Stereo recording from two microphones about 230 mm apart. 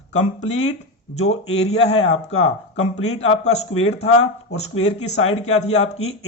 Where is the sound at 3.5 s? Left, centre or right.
Left.